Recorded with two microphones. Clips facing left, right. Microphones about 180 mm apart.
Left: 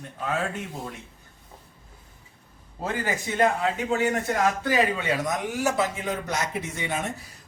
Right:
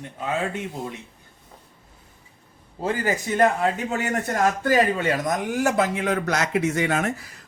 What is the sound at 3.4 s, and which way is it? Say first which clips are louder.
A man's voice: right 2 dB; 45° right (ahead or behind).